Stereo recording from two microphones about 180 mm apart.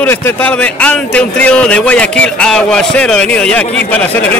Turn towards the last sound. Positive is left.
turn(degrees=10)  # may be behind; listen again after turning